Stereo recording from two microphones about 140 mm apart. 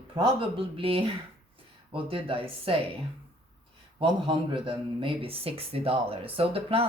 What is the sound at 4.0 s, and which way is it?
A man's voice, 40° right (ahead or behind).